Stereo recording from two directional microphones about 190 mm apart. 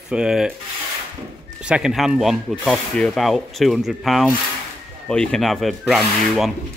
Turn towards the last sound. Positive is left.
turn(degrees=0)  # may be behind; listen again after turning